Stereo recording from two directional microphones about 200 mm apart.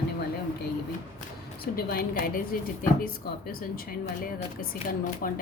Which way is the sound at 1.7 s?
45° left (ahead or behind).